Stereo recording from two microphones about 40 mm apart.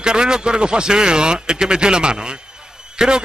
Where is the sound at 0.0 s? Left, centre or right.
Right.